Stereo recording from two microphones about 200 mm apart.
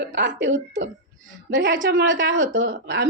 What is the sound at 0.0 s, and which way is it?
Speech, 60° right (ahead or behind).